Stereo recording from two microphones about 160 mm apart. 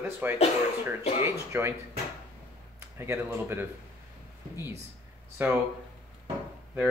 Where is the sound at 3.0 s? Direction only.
15° right (ahead or behind).